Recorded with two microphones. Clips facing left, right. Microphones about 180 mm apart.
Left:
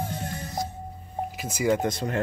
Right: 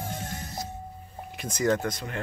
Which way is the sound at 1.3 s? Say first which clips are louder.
Left 1 dB; 10° left (ahead or behind).